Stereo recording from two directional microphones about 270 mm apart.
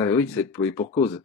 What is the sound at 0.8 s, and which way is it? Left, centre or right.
Speech, left.